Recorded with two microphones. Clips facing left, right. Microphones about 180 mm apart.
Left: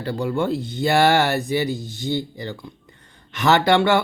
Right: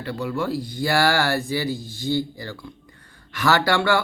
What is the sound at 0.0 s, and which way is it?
A man's voice, 30° left (ahead or behind).